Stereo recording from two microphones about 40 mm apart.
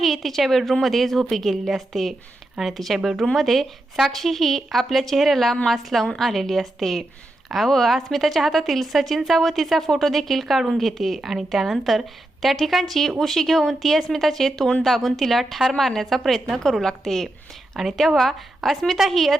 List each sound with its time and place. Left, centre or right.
0.0 s a woman's voice: centre